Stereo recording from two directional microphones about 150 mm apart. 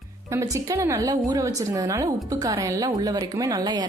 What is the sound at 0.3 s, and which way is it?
A woman's voice, 20° right (ahead or behind).